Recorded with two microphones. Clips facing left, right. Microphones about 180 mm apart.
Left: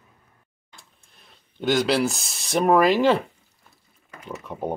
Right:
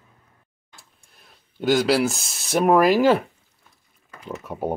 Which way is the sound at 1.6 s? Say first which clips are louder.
Right 2 dB; 5° right (ahead or behind).